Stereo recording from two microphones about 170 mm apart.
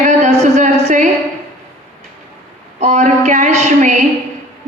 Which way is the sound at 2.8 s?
40° right (ahead or behind).